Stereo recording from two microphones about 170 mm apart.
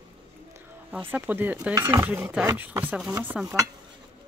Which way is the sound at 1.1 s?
10° right (ahead or behind).